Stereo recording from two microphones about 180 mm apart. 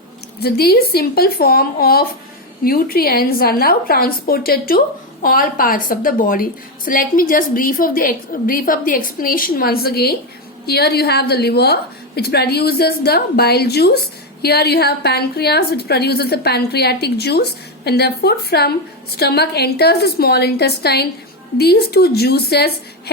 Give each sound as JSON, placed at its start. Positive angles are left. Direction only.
{"t": 0.3, "sound": "a woman's voice", "side_deg": 60}